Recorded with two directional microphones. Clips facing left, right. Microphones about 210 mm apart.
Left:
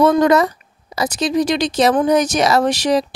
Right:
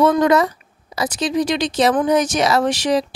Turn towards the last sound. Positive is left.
turn(degrees=40)  # may be behind; listen again after turning